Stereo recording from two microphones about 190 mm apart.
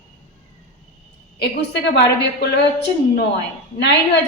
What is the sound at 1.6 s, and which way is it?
A woman's voice, 60° left (ahead or behind).